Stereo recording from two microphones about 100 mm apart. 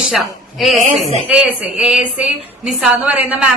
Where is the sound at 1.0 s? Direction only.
80° left.